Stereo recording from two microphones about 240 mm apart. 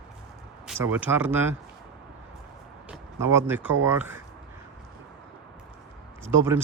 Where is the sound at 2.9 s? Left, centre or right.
Centre.